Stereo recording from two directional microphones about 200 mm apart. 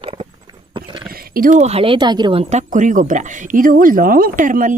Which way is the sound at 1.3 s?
40° right (ahead or behind).